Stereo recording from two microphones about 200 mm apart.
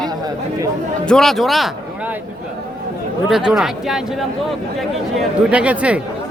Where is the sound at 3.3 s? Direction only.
Centre (ahead or behind).